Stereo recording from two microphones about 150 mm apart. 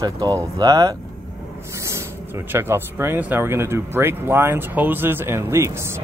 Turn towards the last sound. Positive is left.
turn(degrees=-15)  # may be behind; listen again after turning